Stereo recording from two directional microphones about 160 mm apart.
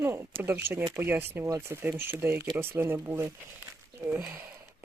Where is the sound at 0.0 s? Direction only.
15° right (ahead or behind).